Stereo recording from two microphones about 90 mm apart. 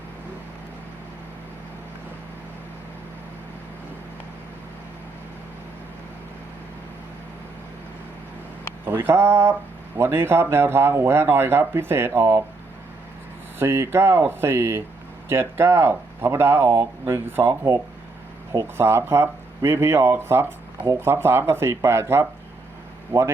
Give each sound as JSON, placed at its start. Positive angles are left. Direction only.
{"t": 8.8, "sound": "speech", "side_deg": -25}
{"t": 13.6, "sound": "speech", "side_deg": -30}
{"t": 18.8, "sound": "speech", "side_deg": -30}